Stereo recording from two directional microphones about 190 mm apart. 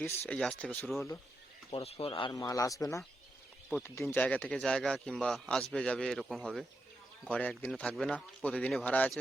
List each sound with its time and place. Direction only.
0.0 s speech: 10° left (ahead or behind)
1.7 s speech: 30° left (ahead or behind); by 9.1 s 5° left (ahead or behind)